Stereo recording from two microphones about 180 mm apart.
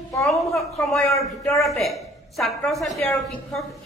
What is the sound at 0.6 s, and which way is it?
A man's voice, centre (ahead or behind).